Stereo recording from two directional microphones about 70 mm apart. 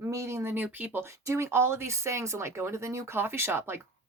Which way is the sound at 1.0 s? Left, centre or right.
Right.